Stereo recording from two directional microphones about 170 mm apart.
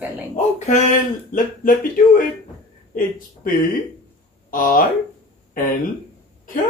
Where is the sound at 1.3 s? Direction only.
55° left (ahead or behind).